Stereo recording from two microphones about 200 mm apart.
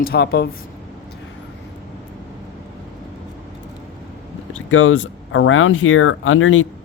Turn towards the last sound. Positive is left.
turn(degrees=85)